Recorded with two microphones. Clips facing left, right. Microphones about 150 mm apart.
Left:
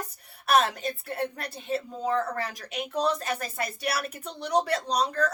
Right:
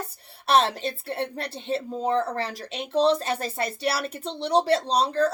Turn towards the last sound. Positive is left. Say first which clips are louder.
# right 4 dB
turn(degrees=-30)  # may be behind; listen again after turning